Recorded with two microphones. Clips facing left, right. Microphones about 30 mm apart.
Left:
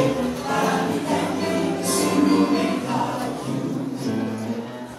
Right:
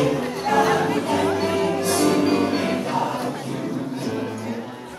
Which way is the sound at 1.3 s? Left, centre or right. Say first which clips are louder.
Right 2 dB; centre.